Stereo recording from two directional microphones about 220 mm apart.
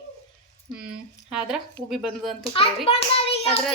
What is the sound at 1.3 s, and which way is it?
A woman's voice, 5° right (ahead or behind).